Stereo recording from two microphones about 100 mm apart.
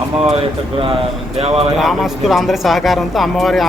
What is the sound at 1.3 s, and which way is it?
Speech, 90° right.